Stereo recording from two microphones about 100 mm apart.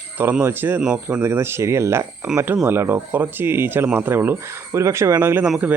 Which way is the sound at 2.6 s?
20° right (ahead or behind).